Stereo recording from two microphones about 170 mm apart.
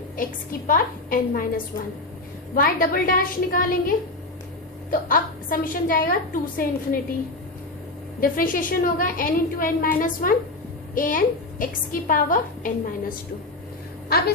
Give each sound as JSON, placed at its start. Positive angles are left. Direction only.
{"t": 0.7, "sound": "a woman's voice", "side_deg": 55}
{"t": 8.2, "sound": "a woman's voice", "side_deg": 55}